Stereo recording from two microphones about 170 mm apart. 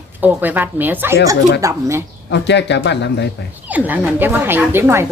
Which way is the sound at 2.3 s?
90° left.